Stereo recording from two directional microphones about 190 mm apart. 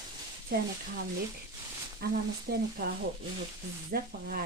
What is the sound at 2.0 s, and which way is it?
Speech, 55° right (ahead or behind).